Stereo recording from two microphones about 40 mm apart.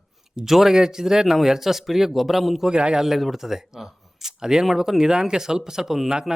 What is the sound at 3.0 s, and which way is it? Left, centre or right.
Speech, centre.